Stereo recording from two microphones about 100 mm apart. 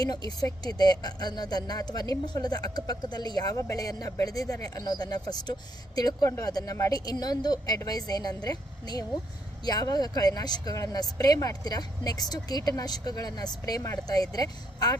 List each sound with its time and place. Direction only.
0.0 s speech: 40° left (ahead or behind)
6.2 s speech: 25° left (ahead or behind)
6.5 s speech: 40° left (ahead or behind)